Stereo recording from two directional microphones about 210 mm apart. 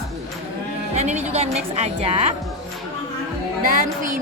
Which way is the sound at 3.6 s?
40° right (ahead or behind).